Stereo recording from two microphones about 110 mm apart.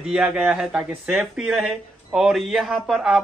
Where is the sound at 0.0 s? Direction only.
5° right (ahead or behind).